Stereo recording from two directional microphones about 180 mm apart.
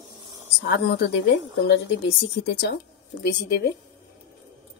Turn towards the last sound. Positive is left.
turn(degrees=60)  # may be behind; listen again after turning